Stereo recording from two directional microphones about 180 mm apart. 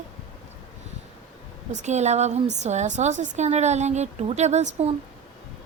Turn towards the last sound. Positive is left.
turn(degrees=-40)  # may be behind; listen again after turning